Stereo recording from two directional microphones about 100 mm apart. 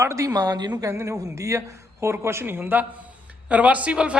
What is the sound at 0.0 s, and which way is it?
Speech, 30° right (ahead or behind).